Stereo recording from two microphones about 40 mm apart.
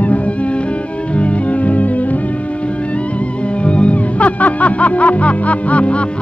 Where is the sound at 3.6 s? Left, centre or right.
Left.